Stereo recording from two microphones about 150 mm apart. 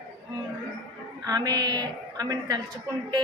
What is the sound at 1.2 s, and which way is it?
A woman's voice, 25° right (ahead or behind).